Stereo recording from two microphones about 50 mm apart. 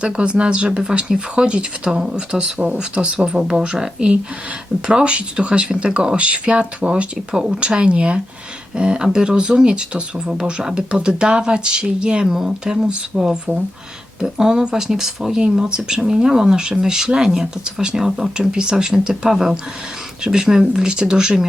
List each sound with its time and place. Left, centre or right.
0.0 s speech: right